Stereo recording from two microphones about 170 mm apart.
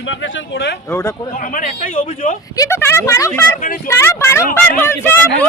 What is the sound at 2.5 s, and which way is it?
Speech, 15° left (ahead or behind).